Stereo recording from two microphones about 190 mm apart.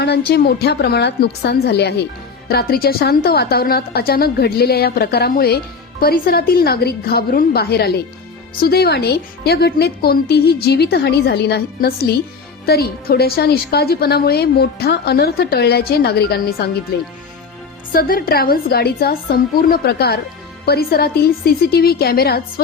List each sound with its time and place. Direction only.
0.0 s a woman's voice: 60° left (ahead or behind)